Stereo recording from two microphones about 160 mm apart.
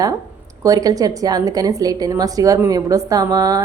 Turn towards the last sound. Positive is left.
turn(degrees=-25)  # may be behind; listen again after turning